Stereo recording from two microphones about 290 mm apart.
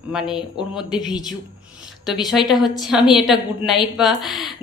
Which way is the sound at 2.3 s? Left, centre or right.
Centre.